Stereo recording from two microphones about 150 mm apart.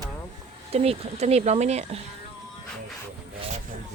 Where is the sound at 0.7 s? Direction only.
45° right (ahead or behind).